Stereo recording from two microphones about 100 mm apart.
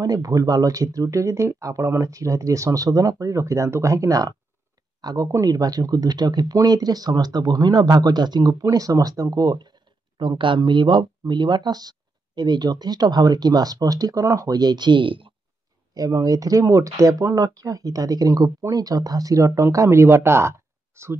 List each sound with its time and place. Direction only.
0.0 s speech: 40° right (ahead or behind); by 15.3 s 60° right (ahead or behind)
15.9 s speech: 35° right (ahead or behind)